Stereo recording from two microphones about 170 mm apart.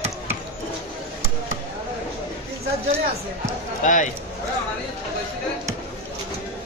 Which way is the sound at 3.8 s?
45° left (ahead or behind).